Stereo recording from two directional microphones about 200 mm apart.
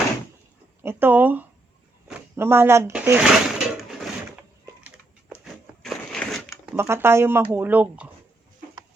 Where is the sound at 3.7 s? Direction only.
Centre (ahead or behind).